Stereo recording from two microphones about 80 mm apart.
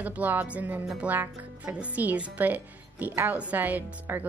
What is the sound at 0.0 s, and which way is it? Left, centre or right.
A woman's voice, right.